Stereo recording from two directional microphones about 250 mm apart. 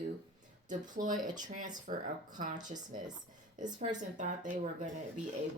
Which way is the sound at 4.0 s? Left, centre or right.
Right.